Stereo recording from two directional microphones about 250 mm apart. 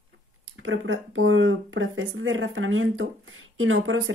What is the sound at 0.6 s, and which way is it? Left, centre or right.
Speech, right.